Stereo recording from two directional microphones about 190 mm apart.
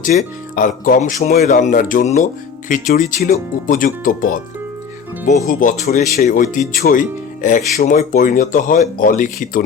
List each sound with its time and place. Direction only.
0.0 s speech: 40° left (ahead or behind)
5.5 s speech: 45° left (ahead or behind)